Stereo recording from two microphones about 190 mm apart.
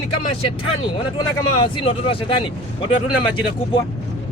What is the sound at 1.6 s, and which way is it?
Speech, 30° left (ahead or behind).